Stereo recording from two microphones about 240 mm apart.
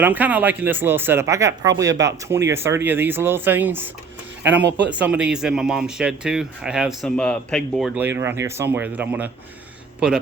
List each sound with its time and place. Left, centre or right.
0.0 s speech: centre